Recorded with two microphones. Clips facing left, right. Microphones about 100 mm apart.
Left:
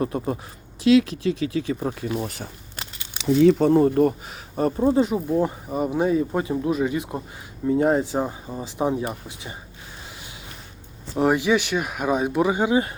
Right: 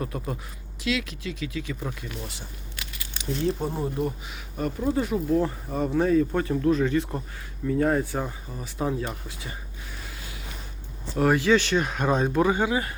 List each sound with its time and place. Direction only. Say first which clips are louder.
0.0 s speech: left 7 dB; 30° left (ahead or behind)
2.1 s speech: left 9 dB; 50° left (ahead or behind)
2.7 s a sound: left 2 dB; 30° left (ahead or behind)
3.4 s speech: left 12 dB; 75° left (ahead or behind); by 4.1 s 60° left (ahead or behind)
4.3 s speech: left 6 dB; 35° left (ahead or behind)
4.9 s speech: left 1 dB; 20° left (ahead or behind)
11.2 s speech: left 1 dB; 20° left (ahead or behind)